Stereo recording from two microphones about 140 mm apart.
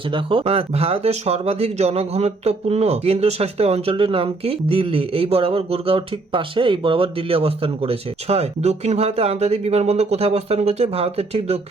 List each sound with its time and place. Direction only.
0.1 s speech: 40° right (ahead or behind)